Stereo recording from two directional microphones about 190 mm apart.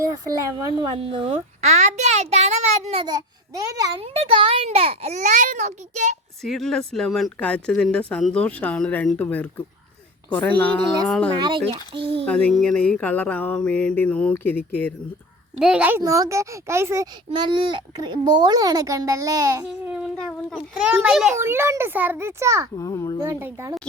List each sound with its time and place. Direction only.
0.0 s a child's voice: 15° right (ahead or behind)
0.9 s a child's voice: 30° right (ahead or behind)
6.4 s a woman's voice: centre (ahead or behind)
11.3 s a child's voice: 25° right (ahead or behind)
12.2 s a sound: 5° left (ahead or behind)
15.5 s a child's voice: 5° right (ahead or behind)
19.9 s a child's voice: centre (ahead or behind)
22.8 s a sound: 15° left (ahead or behind)
23.2 s a child's voice: 15° right (ahead or behind)